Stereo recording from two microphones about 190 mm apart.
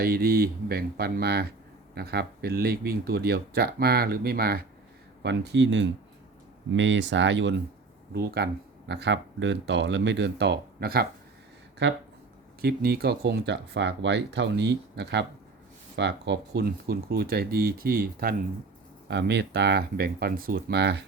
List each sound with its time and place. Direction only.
0.0 s speech: 50° right (ahead or behind)
5.2 s speech: 65° right (ahead or behind)
8.1 s speech: 55° right (ahead or behind)
8.9 s speech: 65° right (ahead or behind)
12.6 s speech: 55° right (ahead or behind)
19.0 s speech: 60° right (ahead or behind)